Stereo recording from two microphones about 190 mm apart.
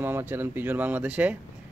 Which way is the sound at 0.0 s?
10° right (ahead or behind).